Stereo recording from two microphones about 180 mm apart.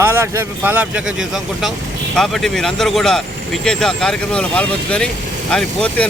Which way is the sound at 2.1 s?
Centre (ahead or behind).